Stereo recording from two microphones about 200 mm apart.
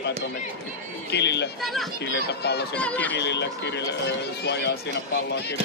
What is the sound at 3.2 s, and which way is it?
Speech, 60° left (ahead or behind).